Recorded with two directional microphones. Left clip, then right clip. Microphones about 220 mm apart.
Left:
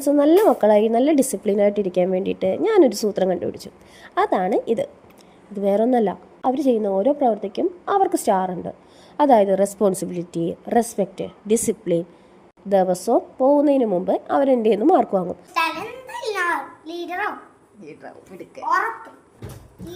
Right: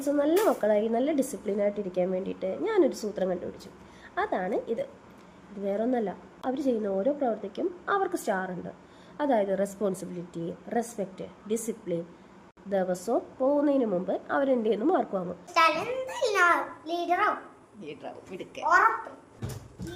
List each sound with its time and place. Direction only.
0.0 s speech: 30° left (ahead or behind)
15.5 s a child's voice: 10° right (ahead or behind)